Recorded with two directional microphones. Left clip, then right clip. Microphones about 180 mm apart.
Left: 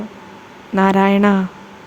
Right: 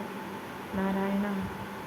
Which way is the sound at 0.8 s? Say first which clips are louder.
Left 18 dB; 75° left (ahead or behind).